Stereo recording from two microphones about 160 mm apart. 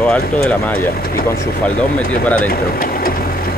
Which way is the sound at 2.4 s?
65° left (ahead or behind).